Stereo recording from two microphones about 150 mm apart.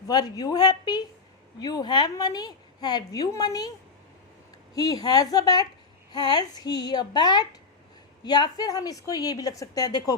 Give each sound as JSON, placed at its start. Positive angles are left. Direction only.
{"t": 0.1, "sound": "a woman's voice", "side_deg": 25}
{"t": 4.7, "sound": "a woman's voice", "side_deg": 25}